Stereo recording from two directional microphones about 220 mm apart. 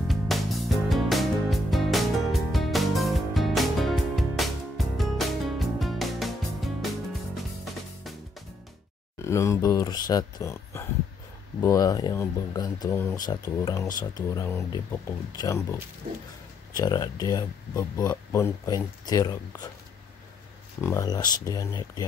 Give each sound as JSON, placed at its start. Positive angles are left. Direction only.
{"t": 0.1, "sound": "music", "side_deg": 0}
{"t": 9.2, "sound": "speech", "side_deg": 15}
{"t": 16.7, "sound": "speech", "side_deg": 15}
{"t": 20.8, "sound": "speech", "side_deg": 15}